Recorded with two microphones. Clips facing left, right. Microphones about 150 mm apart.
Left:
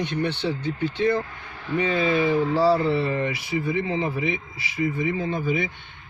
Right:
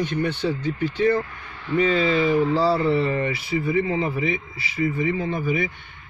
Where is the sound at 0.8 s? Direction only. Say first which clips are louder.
Right 2 dB; 20° left (ahead or behind).